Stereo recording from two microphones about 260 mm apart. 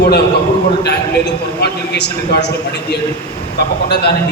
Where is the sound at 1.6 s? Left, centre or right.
Left.